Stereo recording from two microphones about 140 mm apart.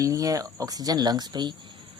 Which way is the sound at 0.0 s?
25° right (ahead or behind).